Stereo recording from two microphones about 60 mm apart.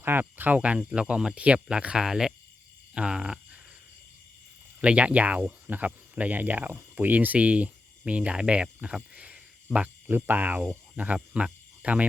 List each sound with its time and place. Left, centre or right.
0.0 s speech: right; by 3.6 s centre
4.8 s speech: centre
9.7 s speech: centre
10.1 s speech: right